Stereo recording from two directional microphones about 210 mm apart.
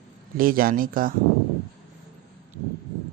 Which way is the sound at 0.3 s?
45° right (ahead or behind).